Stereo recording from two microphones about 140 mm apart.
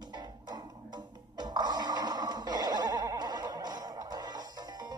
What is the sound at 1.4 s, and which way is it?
Music, 30° right (ahead or behind).